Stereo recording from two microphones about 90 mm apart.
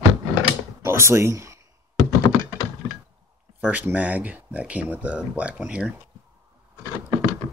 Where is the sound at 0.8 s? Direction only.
30° right (ahead or behind).